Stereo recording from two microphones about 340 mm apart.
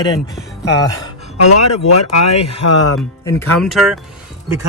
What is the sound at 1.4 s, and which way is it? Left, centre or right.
Speech, left.